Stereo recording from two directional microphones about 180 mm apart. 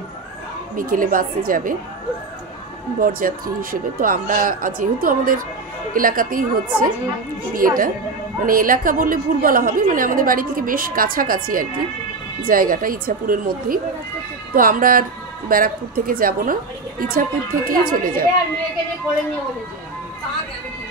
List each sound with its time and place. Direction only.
0.7 s a woman's voice: 50° right (ahead or behind)
3.0 s a woman's voice: 50° right (ahead or behind)